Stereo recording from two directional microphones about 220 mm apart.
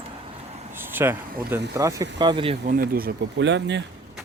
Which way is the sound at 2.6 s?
45° right (ahead or behind).